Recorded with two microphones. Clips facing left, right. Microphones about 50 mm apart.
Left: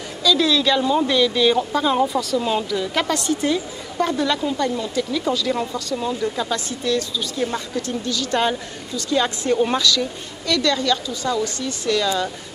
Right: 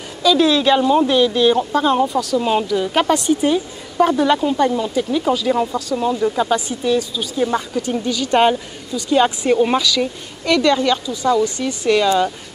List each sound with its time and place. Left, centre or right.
0.2 s a woman's voice: right
2.4 s a woman's voice: right
10.4 s a woman's voice: right